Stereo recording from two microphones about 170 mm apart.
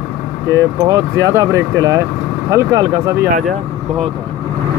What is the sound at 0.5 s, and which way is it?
Speech, 20° right (ahead or behind).